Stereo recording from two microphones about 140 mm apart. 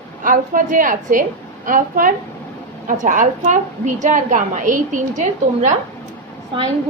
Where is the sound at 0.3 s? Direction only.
75° right (ahead or behind).